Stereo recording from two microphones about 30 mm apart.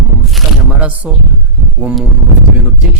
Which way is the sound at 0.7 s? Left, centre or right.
Right.